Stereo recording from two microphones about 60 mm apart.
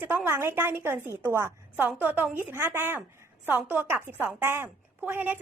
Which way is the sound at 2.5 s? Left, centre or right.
Right.